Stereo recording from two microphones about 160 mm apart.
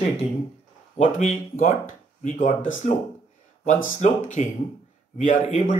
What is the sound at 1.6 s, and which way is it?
Speech, 50° left (ahead or behind).